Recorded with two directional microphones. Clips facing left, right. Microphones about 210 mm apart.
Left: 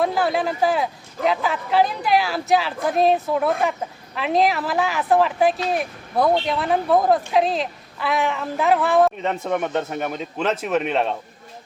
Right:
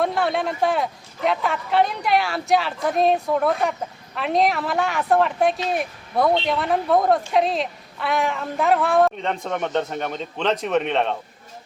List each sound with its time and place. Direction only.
0.0 s a man's voice: centre (ahead or behind)